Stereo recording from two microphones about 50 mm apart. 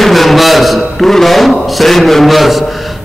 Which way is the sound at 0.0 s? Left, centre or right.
Centre.